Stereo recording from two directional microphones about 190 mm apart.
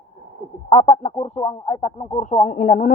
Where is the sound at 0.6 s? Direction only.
30° left (ahead or behind).